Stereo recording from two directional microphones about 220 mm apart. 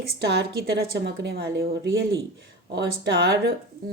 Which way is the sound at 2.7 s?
50° right (ahead or behind).